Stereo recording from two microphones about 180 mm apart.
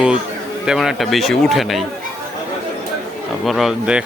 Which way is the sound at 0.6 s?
5° right (ahead or behind).